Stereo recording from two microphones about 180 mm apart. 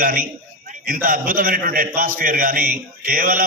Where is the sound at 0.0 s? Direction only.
55° right (ahead or behind).